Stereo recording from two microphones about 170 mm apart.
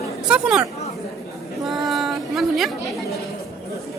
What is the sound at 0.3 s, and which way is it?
Speech, 5° right (ahead or behind).